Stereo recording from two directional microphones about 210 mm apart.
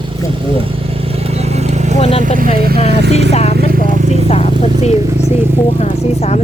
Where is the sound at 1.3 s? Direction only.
30° right (ahead or behind).